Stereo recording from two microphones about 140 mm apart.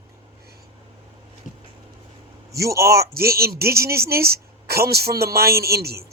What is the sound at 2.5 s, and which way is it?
Speech, 20° right (ahead or behind).